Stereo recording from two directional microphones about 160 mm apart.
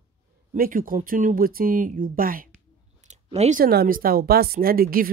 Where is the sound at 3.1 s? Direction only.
45° right (ahead or behind).